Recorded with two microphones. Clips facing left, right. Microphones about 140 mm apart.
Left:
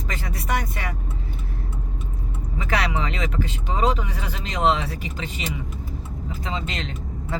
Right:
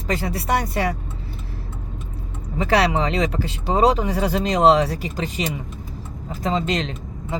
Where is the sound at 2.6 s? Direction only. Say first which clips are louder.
Right 6 dB; 35° right (ahead or behind).